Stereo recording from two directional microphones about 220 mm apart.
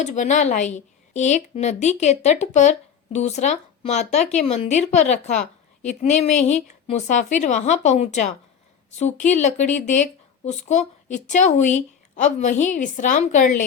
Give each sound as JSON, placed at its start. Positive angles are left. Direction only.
{"t": 0.0, "sound": "a woman's voice", "side_deg": 30}